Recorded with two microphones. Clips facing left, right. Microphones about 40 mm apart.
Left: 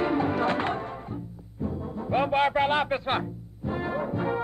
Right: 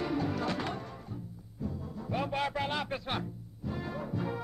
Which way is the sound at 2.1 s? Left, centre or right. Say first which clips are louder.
Left 9 dB; left.